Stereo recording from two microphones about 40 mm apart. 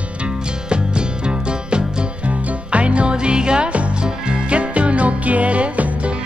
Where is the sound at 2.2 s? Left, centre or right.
Right.